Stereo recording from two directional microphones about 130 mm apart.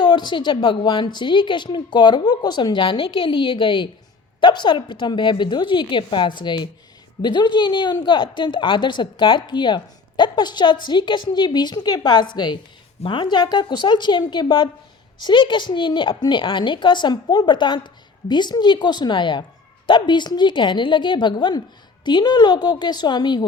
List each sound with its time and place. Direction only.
0.0 s a woman's voice: 35° left (ahead or behind)